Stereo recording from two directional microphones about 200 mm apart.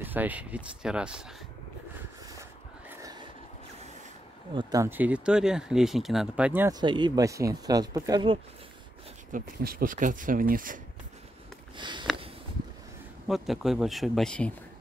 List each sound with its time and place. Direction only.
0.0 s speech: 10° right (ahead or behind)
2.9 s a sound: 20° right (ahead or behind)
4.6 s speech: 20° right (ahead or behind)
6.8 s speech: 20° right (ahead or behind)
9.3 s speech: 45° right (ahead or behind)
11.7 s sniff: 25° right (ahead or behind)
13.3 s speech: centre (ahead or behind)